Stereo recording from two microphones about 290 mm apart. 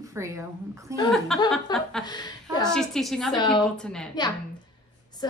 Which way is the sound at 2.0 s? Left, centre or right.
Centre.